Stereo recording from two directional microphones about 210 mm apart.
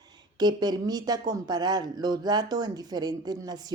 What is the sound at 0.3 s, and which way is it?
A woman's voice, 20° right (ahead or behind).